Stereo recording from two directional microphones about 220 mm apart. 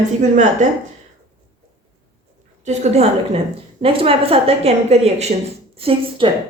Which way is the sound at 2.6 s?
30° right (ahead or behind).